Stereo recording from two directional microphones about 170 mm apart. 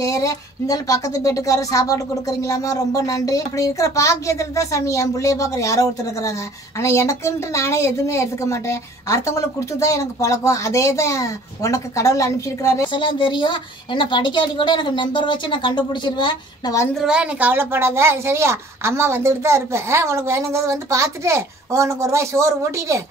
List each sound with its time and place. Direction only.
0.0 s a woman's voice: 20° left (ahead or behind)
12.9 s speech: 30° left (ahead or behind)
16.9 s a woman's voice: 5° right (ahead or behind)